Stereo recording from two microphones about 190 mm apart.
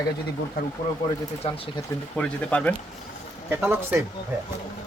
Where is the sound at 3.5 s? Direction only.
10° right (ahead or behind).